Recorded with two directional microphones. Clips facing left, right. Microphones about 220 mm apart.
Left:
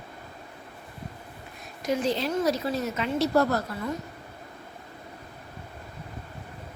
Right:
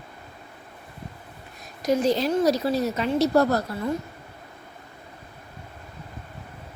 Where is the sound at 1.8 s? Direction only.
40° right (ahead or behind).